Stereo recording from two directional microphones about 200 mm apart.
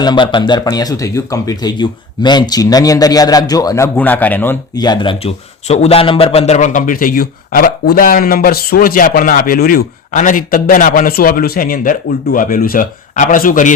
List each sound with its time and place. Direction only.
0.0 s speech: 20° left (ahead or behind)
4.7 s a man's voice: 20° left (ahead or behind); by 13.7 s 40° left (ahead or behind)